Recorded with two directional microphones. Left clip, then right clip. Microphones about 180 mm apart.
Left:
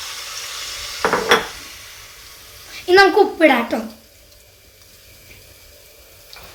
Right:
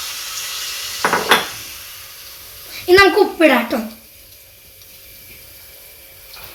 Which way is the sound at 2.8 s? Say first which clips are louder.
Right 1 dB; 35° right (ahead or behind).